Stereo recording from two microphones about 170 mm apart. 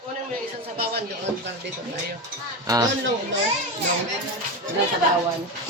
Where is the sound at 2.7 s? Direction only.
20° right (ahead or behind).